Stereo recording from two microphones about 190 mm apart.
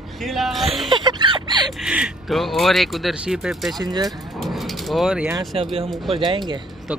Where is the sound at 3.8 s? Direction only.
20° right (ahead or behind).